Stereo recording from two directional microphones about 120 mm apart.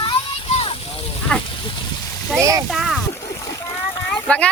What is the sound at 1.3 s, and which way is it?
Speech, 10° left (ahead or behind).